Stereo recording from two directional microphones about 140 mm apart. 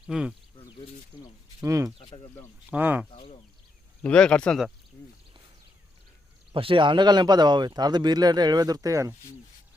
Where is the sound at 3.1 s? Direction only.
45° left (ahead or behind).